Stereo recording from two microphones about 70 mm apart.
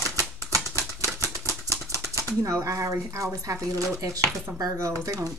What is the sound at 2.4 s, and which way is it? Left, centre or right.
Speech, right.